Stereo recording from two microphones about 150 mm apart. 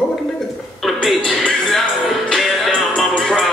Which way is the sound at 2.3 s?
Centre (ahead or behind).